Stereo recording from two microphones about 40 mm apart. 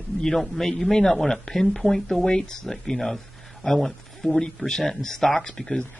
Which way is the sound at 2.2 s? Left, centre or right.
Centre.